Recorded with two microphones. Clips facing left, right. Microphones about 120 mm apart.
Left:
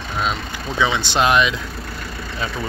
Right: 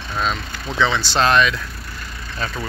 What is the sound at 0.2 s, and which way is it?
Speech, 10° left (ahead or behind).